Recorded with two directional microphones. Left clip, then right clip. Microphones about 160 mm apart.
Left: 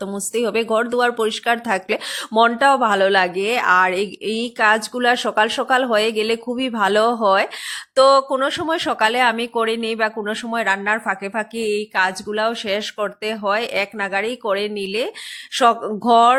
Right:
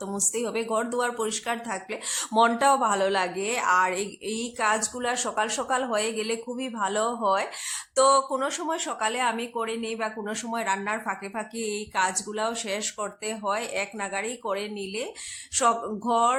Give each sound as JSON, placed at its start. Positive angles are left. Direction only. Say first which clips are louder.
{"t": 0.0, "sound": "speech", "louder": "left 7 dB", "side_deg": 30}
{"t": 2.1, "sound": "speech", "louder": "left 5 dB", "side_deg": 25}